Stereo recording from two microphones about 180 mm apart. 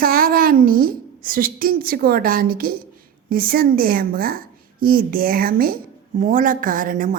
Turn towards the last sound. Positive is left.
turn(degrees=-50)  # may be behind; listen again after turning